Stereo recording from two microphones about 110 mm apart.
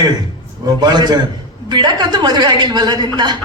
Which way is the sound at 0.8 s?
40° right (ahead or behind).